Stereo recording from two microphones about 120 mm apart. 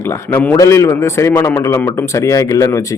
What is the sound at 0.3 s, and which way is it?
Speech, 15° left (ahead or behind).